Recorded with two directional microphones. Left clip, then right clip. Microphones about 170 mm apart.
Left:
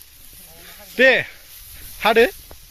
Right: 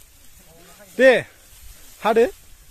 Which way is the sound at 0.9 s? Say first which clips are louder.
Even; centre (ahead or behind).